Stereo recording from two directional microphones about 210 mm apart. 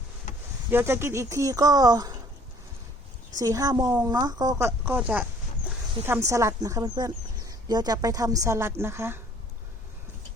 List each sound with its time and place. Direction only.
0.7 s speech: 10° right (ahead or behind)
3.3 s speech: 15° right (ahead or behind)